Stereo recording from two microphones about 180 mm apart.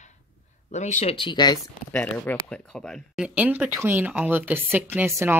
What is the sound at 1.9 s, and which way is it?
Speech, 10° left (ahead or behind).